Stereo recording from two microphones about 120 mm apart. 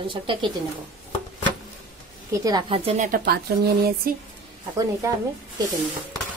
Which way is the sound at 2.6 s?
55° right (ahead or behind).